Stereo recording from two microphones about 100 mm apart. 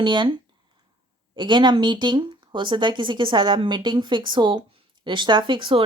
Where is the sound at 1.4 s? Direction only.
50° right (ahead or behind).